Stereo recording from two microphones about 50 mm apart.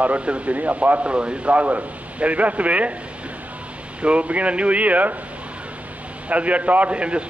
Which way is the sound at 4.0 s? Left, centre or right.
Right.